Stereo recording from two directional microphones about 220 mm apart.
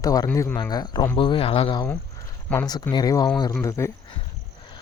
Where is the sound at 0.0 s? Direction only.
15° left (ahead or behind).